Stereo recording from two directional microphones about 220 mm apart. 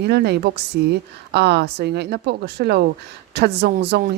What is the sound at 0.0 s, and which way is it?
Speech, 50° right (ahead or behind).